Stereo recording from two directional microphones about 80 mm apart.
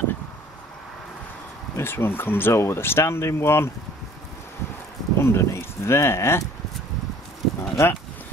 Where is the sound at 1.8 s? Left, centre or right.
Left.